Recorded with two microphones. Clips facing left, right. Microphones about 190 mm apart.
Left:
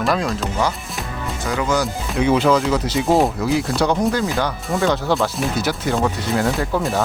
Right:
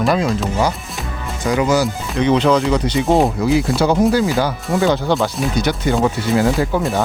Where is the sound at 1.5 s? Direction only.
15° right (ahead or behind).